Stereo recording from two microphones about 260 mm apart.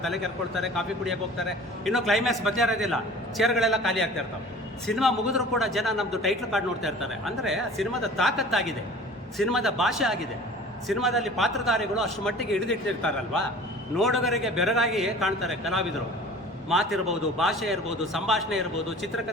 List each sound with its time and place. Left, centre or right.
0.0 s a man's voice: centre